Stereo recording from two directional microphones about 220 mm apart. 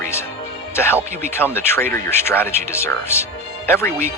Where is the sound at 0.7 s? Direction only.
10° left (ahead or behind).